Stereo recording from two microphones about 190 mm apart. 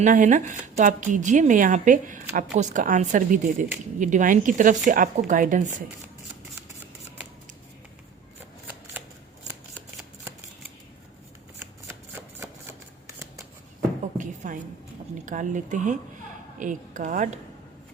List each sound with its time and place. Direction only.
0.0 s speech: 40° right (ahead or behind)
13.1 s shuffling cards: 10° right (ahead or behind)
14.2 s a sound: 40° right (ahead or behind)
15.3 s speech: 40° right (ahead or behind)